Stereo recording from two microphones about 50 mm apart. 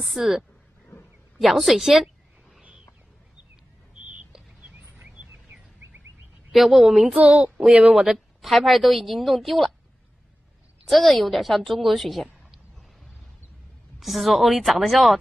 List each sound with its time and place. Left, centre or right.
0.0 s a woman's voice: centre
6.5 s a woman's voice: centre
7.2 s speech: right
7.9 s a woman's voice: centre
10.9 s a woman's voice: centre
13.9 s a woman's voice: centre